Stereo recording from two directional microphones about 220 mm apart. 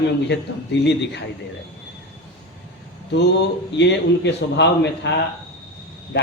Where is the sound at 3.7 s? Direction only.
50° left (ahead or behind).